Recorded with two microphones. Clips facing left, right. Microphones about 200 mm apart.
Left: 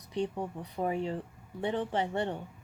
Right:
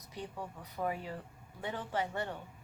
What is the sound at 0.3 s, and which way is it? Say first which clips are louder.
A woman's voice: left 6 dB; 25° left (ahead or behind).